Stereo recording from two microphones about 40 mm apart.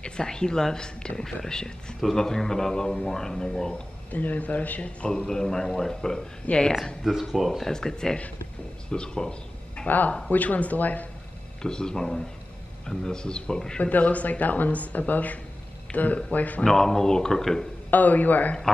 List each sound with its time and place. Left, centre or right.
0.0 s a man's voice: left
4.1 s speech: left
5.0 s a man's voice: centre
6.5 s speech: left
7.0 s speech: centre
7.7 s a man's voice: centre
9.8 s a man's voice: left
11.6 s a man's voice: centre
13.7 s speech: left
16.6 s a man's voice: centre
17.9 s a man's voice: left